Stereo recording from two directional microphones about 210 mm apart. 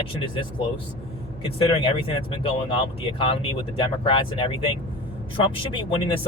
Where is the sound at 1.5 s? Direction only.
25° left (ahead or behind).